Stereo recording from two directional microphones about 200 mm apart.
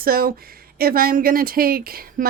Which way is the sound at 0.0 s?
50° right (ahead or behind).